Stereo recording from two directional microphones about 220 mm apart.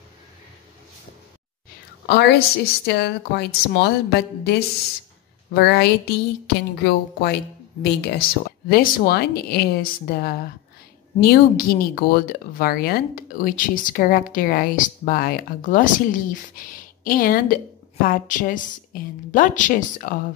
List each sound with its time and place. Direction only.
2.0 s speech: 50° left (ahead or behind)